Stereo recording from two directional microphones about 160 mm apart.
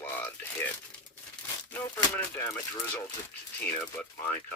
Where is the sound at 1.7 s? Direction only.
10° left (ahead or behind).